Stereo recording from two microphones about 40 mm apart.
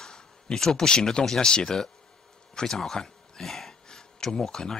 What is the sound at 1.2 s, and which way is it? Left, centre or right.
Speech, centre.